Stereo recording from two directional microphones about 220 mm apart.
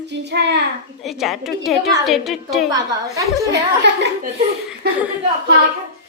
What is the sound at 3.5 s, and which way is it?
Speech, 50° right (ahead or behind).